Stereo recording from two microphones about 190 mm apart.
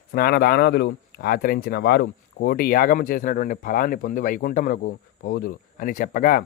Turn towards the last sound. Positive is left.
turn(degrees=45)  # may be behind; listen again after turning